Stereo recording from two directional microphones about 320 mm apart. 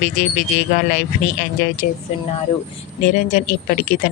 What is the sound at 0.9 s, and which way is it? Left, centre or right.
Speech, left.